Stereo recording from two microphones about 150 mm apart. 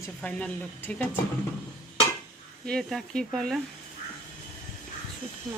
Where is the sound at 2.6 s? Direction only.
Centre (ahead or behind).